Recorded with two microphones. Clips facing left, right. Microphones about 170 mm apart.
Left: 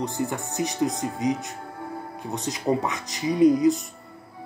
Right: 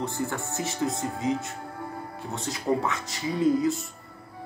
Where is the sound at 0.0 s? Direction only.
20° left (ahead or behind).